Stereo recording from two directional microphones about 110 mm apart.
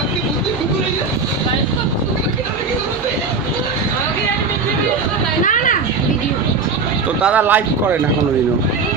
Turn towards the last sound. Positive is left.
turn(degrees=-15)  # may be behind; listen again after turning